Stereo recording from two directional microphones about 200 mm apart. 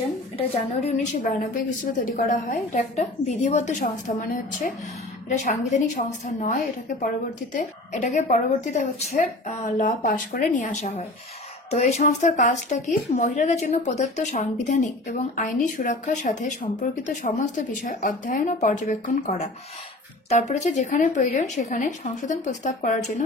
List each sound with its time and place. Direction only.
0.7 s speech: 35° left (ahead or behind)
3.8 s speech: 45° left (ahead or behind)